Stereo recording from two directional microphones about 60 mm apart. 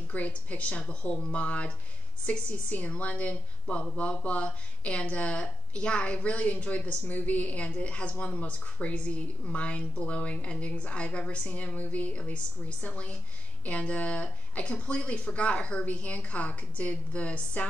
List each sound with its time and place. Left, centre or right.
0.1 s a woman's voice: left